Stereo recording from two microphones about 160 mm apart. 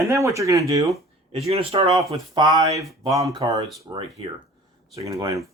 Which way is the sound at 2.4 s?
20° right (ahead or behind).